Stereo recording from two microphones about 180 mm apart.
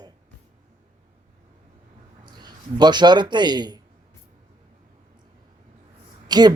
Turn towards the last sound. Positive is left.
turn(degrees=-25)  # may be behind; listen again after turning